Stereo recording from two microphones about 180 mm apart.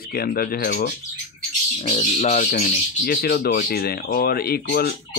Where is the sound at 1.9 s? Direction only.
35° left (ahead or behind).